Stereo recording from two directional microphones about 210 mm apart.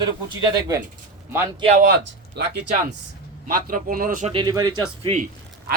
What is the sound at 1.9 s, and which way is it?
Speech, 55° right (ahead or behind).